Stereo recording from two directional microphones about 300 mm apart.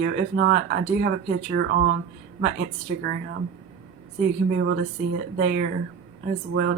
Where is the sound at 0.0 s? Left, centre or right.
Right.